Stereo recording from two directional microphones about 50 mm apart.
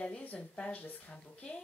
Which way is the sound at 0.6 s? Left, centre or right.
Left.